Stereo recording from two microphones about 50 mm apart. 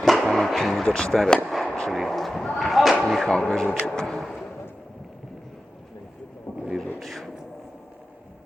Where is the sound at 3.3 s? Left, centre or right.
Centre.